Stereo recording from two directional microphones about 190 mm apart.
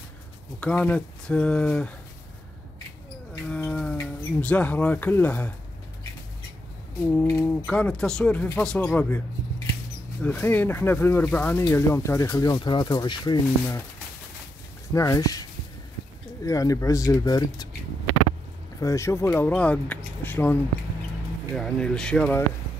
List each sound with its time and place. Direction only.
0.6 s speech: 5° left (ahead or behind)
3.4 s speech: 5° left (ahead or behind)
7.2 s speech: 15° left (ahead or behind)
7.6 s speech: 5° left (ahead or behind)
10.2 s speech: 10° left (ahead or behind)
15.0 s speech: 20° left (ahead or behind)
16.4 s speech: 15° left (ahead or behind)
18.8 s speech: 15° left (ahead or behind)
21.5 s speech: 5° left (ahead or behind)